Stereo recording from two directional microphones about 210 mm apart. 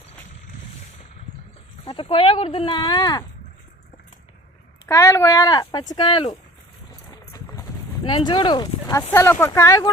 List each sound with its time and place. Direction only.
1.8 s speech: 25° left (ahead or behind)
4.9 s speech: 15° left (ahead or behind)
6.9 s vehicle: 15° left (ahead or behind)
8.0 s speech: 20° left (ahead or behind)